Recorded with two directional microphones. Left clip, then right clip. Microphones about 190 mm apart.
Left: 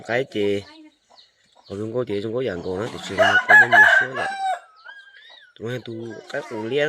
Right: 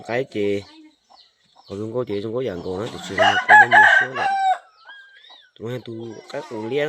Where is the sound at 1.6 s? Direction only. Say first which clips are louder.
Even; centre (ahead or behind).